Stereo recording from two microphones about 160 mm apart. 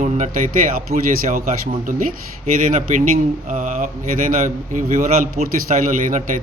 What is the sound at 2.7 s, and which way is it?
A man's voice, 55° right (ahead or behind).